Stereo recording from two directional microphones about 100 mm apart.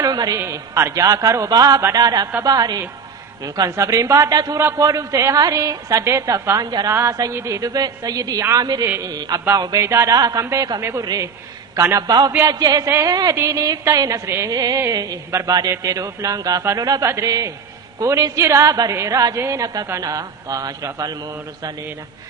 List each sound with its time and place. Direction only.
0.0 s a woman's voice: 40° right (ahead or behind)
0.3 s a woman's voice: 30° right (ahead or behind)
11.0 s a woman's voice: 40° right (ahead or behind)
11.8 s a man's voice: 25° right (ahead or behind)
12.0 s a sound: 40° right (ahead or behind)
12.5 s a woman's voice: 40° right (ahead or behind)
12.9 s a man's voice: 30° right (ahead or behind)
14.3 s a man's voice: 25° right (ahead or behind)
14.5 s a woman's voice: 40° right (ahead or behind)